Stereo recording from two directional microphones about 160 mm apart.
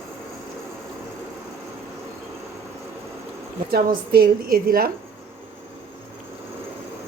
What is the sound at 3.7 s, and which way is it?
A woman's voice, 70° right (ahead or behind).